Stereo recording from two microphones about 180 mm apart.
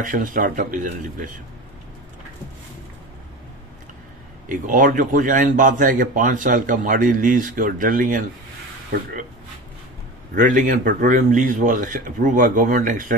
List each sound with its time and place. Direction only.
0.0 s a man's voice: 45° right (ahead or behind)
4.5 s a man's voice: 45° right (ahead or behind)
10.3 s a man's voice: 45° right (ahead or behind)